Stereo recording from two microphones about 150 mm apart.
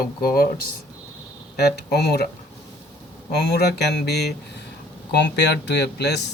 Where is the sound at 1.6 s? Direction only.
90° left.